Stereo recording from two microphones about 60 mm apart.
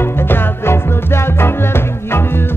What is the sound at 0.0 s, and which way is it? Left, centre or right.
Music, left.